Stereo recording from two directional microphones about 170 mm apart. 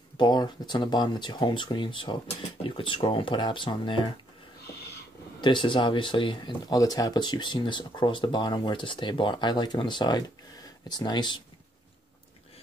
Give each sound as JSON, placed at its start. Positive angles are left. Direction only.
{"t": 0.2, "sound": "speech", "side_deg": 25}
{"t": 5.4, "sound": "speech", "side_deg": 30}